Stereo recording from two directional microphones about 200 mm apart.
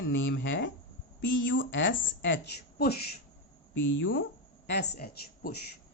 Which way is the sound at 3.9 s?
70° left (ahead or behind).